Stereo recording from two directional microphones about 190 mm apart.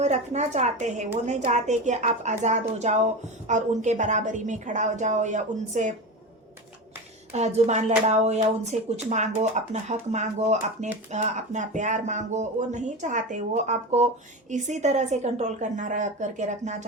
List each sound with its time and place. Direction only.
0.0 s speech: 35° right (ahead or behind)
7.3 s speech: 35° right (ahead or behind)